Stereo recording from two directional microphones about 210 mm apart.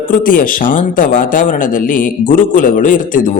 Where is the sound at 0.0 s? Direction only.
40° left (ahead or behind).